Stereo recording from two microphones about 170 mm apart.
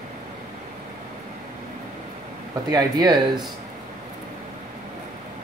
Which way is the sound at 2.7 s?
20° right (ahead or behind).